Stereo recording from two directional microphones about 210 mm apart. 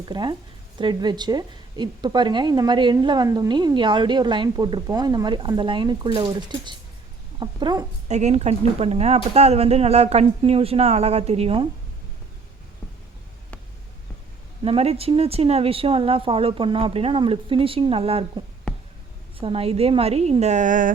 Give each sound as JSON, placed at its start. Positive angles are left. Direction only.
{"t": 0.1, "sound": "a woman's voice", "side_deg": -20}
{"t": 8.0, "sound": "a woman's voice", "side_deg": -35}
{"t": 14.6, "sound": "a woman's voice", "side_deg": -30}
{"t": 19.4, "sound": "a woman's voice", "side_deg": -25}